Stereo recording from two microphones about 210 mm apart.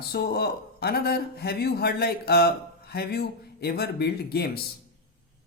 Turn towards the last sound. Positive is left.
turn(degrees=50)  # may be behind; listen again after turning